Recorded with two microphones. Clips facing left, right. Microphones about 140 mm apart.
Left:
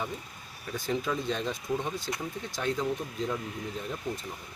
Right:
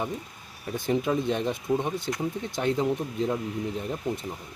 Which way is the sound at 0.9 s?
20° right (ahead or behind).